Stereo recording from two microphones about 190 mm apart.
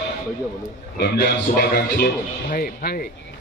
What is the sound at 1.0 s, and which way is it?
A man's voice, 55° left (ahead or behind).